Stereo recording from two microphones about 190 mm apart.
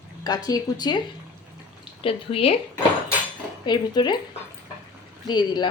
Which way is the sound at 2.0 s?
30° left (ahead or behind).